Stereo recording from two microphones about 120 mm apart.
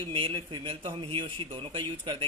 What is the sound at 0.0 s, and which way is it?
A man's voice, 45° right (ahead or behind).